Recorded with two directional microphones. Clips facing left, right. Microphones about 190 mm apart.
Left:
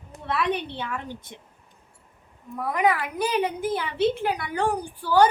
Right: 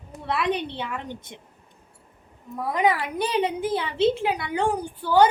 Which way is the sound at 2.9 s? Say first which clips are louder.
Even; 30° right (ahead or behind).